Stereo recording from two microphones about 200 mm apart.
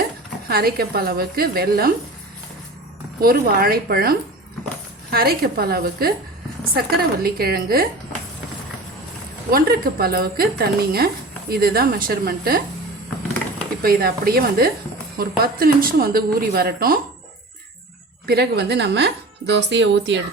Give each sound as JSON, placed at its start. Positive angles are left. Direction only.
{"t": 0.4, "sound": "speech", "side_deg": -50}
{"t": 3.2, "sound": "speech", "side_deg": -50}
{"t": 9.5, "sound": "speech", "side_deg": -45}
{"t": 13.8, "sound": "speech", "side_deg": -50}
{"t": 18.3, "sound": "speech", "side_deg": -55}